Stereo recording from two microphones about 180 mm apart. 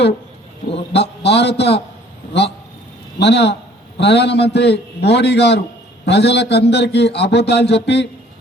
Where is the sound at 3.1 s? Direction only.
70° left (ahead or behind).